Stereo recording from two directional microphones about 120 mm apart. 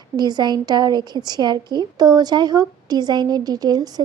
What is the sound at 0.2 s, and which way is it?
A woman's voice, 35° right (ahead or behind).